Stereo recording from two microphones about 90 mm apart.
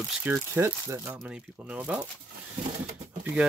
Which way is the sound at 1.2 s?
15° right (ahead or behind).